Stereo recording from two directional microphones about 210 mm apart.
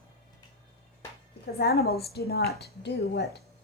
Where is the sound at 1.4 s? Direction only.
50° left (ahead or behind).